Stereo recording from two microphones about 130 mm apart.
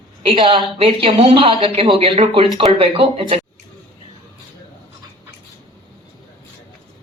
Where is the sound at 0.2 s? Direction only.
45° right (ahead or behind).